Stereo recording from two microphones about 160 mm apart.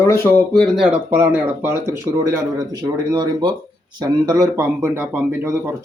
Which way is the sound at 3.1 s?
25° right (ahead or behind).